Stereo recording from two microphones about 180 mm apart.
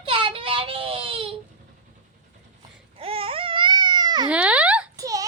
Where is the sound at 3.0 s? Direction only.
30° right (ahead or behind).